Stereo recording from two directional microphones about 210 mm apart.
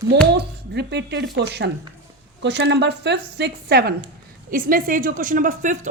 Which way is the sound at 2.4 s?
55° right (ahead or behind).